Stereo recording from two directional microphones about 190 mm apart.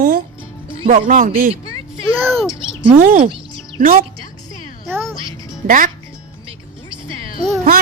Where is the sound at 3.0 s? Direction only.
45° right (ahead or behind).